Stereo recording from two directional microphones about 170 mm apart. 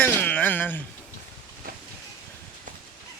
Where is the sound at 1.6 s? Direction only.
55° right (ahead or behind).